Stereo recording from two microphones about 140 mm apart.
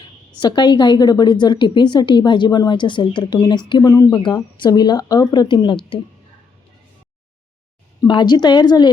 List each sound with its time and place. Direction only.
0.3 s a woman's voice: 35° left (ahead or behind)
8.0 s a woman's voice: 35° left (ahead or behind)